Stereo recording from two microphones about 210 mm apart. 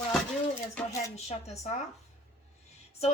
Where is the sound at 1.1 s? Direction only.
30° left (ahead or behind).